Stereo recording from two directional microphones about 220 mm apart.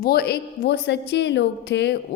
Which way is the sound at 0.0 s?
45° left (ahead or behind).